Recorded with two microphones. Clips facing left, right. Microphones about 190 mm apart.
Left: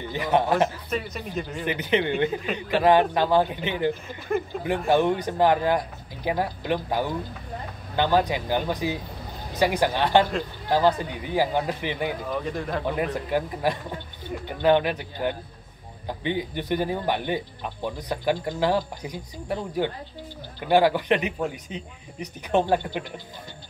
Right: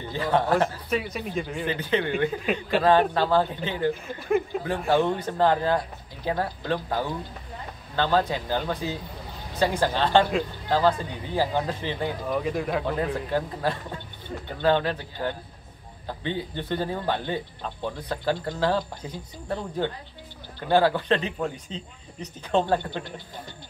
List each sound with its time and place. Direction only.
0.1 s a man's voice: 20° left (ahead or behind)
0.8 s speech: centre (ahead or behind)
1.7 s a man's voice: 20° left (ahead or behind)
12.3 s speech: 5° right (ahead or behind)
12.8 s speech: 15° left (ahead or behind)